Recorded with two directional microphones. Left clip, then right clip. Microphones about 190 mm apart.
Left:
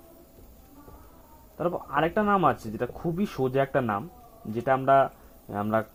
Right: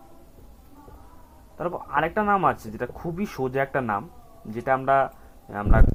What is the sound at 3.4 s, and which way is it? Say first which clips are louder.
Speech: even; 35° left (ahead or behind).